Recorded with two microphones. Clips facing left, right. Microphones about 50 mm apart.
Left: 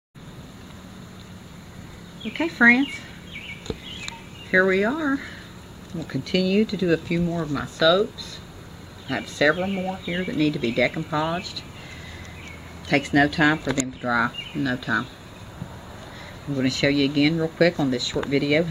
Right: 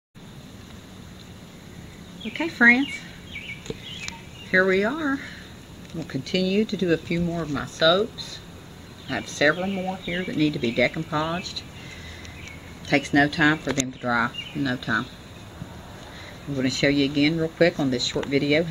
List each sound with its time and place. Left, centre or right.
2.2 s speech: centre
4.0 s a sound: centre
5.9 s speech: centre
12.8 s speech: centre
16.6 s speech: centre